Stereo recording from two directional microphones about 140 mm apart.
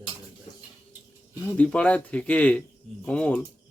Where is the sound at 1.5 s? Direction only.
10° left (ahead or behind).